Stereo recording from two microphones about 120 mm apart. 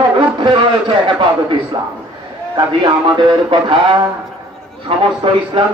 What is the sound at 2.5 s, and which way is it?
Speech, 40° right (ahead or behind).